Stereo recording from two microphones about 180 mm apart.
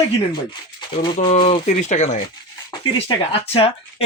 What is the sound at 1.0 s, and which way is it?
Speech, 30° left (ahead or behind).